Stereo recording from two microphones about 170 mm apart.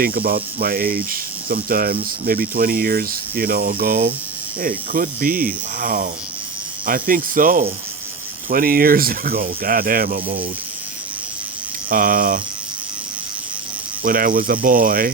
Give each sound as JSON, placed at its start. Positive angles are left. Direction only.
{"t": 0.0, "sound": "speech", "side_deg": -60}
{"t": 11.9, "sound": "speech", "side_deg": -55}
{"t": 14.0, "sound": "speech", "side_deg": -55}